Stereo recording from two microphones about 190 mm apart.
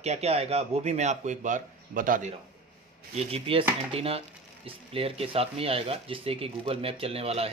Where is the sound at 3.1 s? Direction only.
30° right (ahead or behind).